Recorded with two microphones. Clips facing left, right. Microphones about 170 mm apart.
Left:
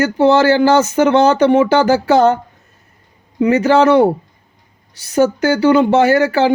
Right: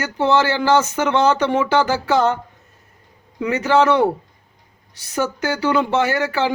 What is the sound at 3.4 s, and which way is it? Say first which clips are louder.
Speech: left 5 dB; 35° left (ahead or behind).